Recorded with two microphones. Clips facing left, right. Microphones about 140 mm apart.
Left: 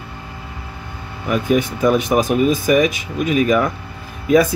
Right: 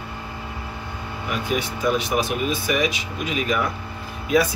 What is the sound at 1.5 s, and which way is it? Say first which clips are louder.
Speech: left 7 dB; 50° left (ahead or behind).